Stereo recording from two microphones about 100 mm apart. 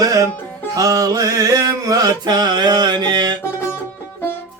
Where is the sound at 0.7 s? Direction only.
35° right (ahead or behind).